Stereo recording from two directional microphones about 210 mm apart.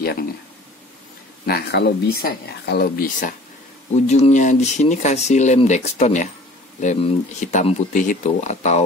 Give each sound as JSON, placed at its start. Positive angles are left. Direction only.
{"t": 1.4, "sound": "speech", "side_deg": 50}